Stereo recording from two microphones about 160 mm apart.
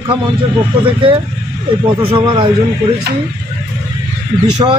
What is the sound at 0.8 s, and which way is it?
Speech, 35° right (ahead or behind).